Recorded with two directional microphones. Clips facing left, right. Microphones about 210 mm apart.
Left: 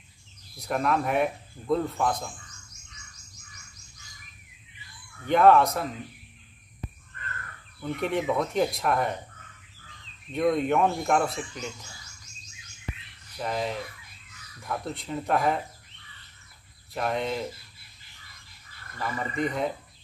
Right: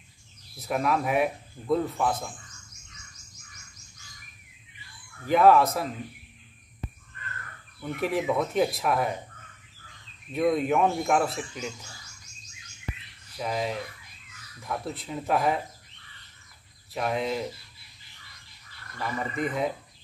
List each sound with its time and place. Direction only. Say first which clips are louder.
0.6 s speech: even; 5° right (ahead or behind)
5.2 s speech: even; centre (ahead or behind)
7.8 s speech: even; centre (ahead or behind)
10.3 s speech: even; centre (ahead or behind)
13.4 s speech: even; centre (ahead or behind)
16.9 s speech: even; centre (ahead or behind)
18.9 s speech: left 1 dB; centre (ahead or behind)